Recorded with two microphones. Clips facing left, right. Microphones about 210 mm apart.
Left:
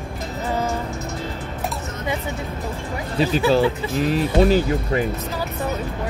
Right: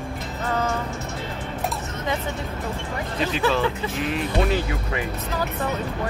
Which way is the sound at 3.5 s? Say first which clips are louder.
Left 5 dB; 35° left (ahead or behind).